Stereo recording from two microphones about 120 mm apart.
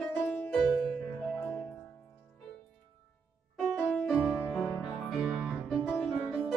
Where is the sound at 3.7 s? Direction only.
5° left (ahead or behind).